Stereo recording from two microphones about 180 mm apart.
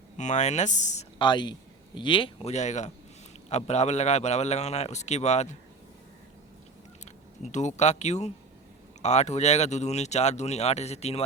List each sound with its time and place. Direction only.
0.2 s speech: 40° left (ahead or behind)
1.2 s speech: 25° left (ahead or behind)
7.8 s speech: 40° left (ahead or behind)